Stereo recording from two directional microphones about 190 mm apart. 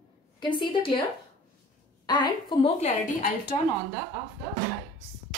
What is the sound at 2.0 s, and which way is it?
Speech, 20° left (ahead or behind).